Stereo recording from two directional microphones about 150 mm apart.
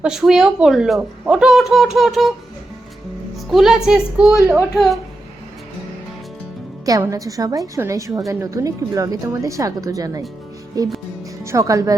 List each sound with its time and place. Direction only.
0.0 s a woman's voice: 5° right (ahead or behind)
3.5 s a woman's voice: centre (ahead or behind)
6.8 s speech: 25° right (ahead or behind)